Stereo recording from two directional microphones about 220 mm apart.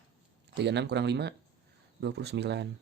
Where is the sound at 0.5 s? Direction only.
50° right (ahead or behind).